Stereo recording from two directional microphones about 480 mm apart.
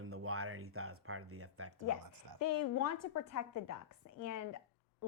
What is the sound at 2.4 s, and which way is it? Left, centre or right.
A woman's voice, left.